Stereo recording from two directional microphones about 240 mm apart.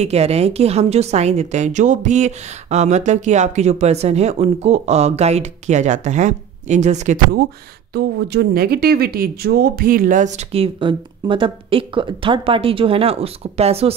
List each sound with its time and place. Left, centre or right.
0.0 s a woman's voice: right
7.9 s a woman's voice: right